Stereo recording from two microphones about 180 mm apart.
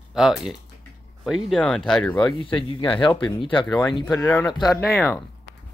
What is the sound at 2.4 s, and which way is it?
Speech, 30° left (ahead or behind).